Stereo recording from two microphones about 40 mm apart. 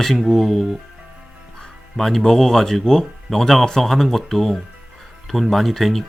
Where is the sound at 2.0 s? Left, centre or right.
Centre.